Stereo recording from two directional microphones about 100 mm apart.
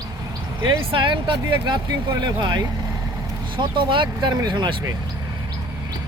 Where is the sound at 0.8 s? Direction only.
60° right (ahead or behind); by 2.3 s 45° right (ahead or behind).